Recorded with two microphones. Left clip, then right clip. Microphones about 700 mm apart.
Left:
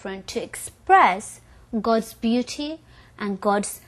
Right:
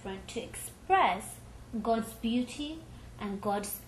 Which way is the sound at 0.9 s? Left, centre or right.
Left.